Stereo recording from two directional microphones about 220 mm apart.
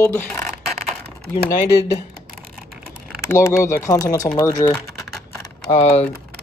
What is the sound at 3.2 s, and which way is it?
Speech, 15° left (ahead or behind).